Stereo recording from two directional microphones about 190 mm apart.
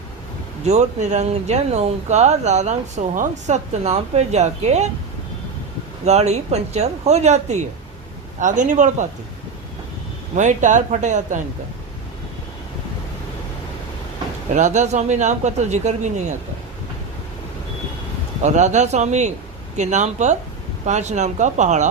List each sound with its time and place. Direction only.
0.6 s speech: 35° right (ahead or behind)
6.1 s speech: 35° right (ahead or behind)
10.3 s speech: 40° right (ahead or behind)
14.5 s speech: 40° right (ahead or behind)
18.4 s speech: 40° right (ahead or behind)